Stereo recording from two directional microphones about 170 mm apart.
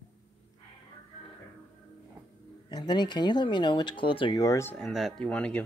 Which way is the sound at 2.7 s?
25° left (ahead or behind).